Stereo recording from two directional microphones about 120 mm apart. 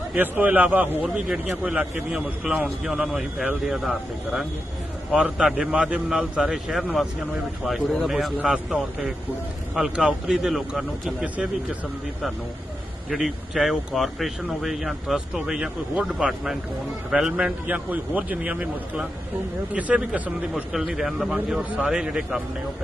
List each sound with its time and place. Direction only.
0.1 s a man's voice: 15° right (ahead or behind)
13.1 s a man's voice: centre (ahead or behind)
20.7 s speech: centre (ahead or behind)